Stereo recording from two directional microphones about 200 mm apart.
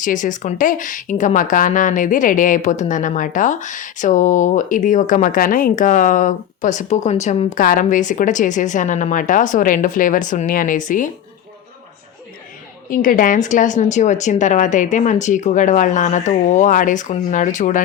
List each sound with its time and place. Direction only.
0.0 s speech: 40° left (ahead or behind)
12.9 s speech: 45° left (ahead or behind)